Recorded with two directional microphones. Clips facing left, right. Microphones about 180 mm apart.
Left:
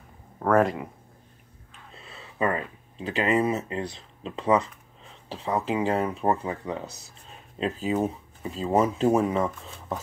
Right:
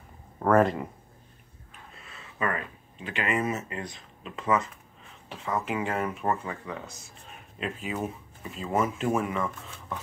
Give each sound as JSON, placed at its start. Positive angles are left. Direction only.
{"t": 0.4, "sound": "speech", "side_deg": 0}
{"t": 2.0, "sound": "speech", "side_deg": 30}